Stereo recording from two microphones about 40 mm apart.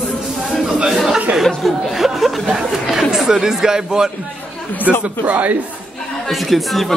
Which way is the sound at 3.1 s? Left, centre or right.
Centre.